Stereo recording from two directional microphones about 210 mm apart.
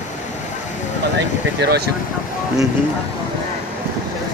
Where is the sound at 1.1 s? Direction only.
50° right (ahead or behind).